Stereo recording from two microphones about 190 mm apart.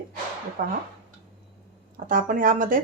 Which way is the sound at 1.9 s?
45° right (ahead or behind).